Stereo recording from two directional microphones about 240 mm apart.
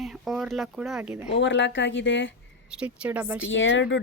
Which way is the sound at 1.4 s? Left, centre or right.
Left.